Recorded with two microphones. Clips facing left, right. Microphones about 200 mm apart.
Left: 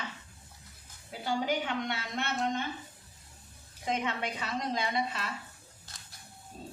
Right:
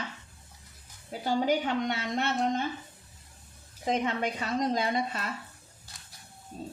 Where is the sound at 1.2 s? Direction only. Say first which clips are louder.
Right 4 dB; 40° right (ahead or behind).